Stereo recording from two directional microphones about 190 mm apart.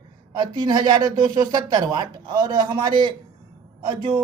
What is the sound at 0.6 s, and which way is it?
Speech, 20° right (ahead or behind).